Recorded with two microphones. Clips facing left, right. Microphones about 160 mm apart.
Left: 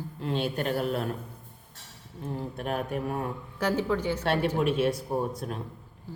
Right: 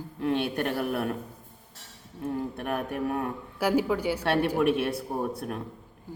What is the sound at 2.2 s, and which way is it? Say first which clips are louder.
Speech: right 3 dB; 60° right (ahead or behind).